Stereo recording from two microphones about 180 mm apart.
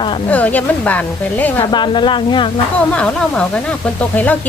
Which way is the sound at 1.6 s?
25° left (ahead or behind).